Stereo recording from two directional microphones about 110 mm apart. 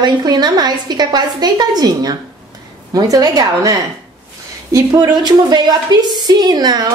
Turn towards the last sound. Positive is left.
turn(degrees=-40)  # may be behind; listen again after turning